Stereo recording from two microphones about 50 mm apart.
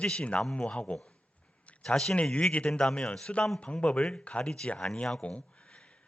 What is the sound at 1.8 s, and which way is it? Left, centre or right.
Speech, centre.